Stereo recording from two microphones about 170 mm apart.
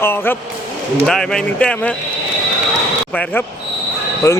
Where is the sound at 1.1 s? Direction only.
Centre (ahead or behind).